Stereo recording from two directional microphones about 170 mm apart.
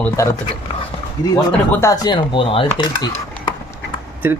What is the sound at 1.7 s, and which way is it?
Speech, 20° left (ahead or behind).